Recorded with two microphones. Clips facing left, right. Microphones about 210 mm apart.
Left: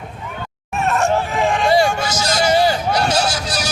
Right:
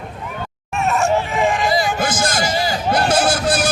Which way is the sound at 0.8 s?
Centre (ahead or behind).